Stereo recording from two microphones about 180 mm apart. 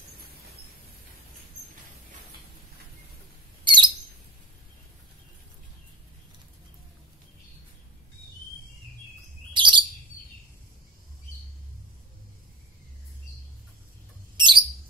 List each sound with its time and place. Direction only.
3.6 s bird: 25° right (ahead or behind)
9.5 s chirp: 25° right (ahead or behind)
14.3 s a sound: 25° right (ahead or behind)